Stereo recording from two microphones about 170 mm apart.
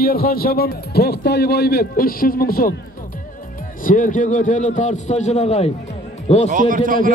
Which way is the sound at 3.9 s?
50° left (ahead or behind).